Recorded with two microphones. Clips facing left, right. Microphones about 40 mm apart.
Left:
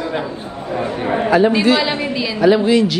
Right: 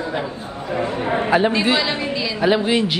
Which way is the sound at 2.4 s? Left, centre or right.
Right.